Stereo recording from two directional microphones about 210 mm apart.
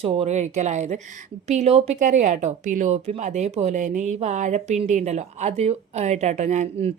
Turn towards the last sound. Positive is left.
turn(degrees=-35)  # may be behind; listen again after turning